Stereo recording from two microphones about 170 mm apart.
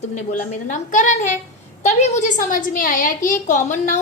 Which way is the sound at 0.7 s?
45° left (ahead or behind).